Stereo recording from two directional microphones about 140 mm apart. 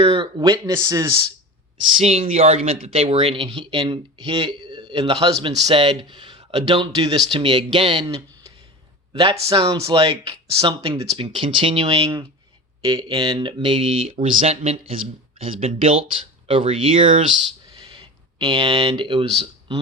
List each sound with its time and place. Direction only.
0.0 s speech: 35° right (ahead or behind)
2.0 s speech: 45° right (ahead or behind)
9.3 s speech: 25° right (ahead or behind)
11.2 s speech: 40° right (ahead or behind)
12.8 s speech: 30° right (ahead or behind)
17.0 s speech: 65° right (ahead or behind)
17.9 s speech: 30° right (ahead or behind)